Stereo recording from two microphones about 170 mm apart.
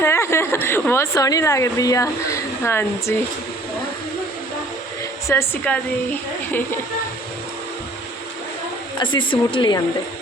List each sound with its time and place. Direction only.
0.0 s a woman's voice: 15° left (ahead or behind)
5.3 s a woman's voice: 10° left (ahead or behind)
9.0 s speech: 30° left (ahead or behind)